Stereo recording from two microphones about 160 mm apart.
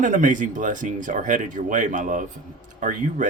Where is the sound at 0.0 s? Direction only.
55° right (ahead or behind).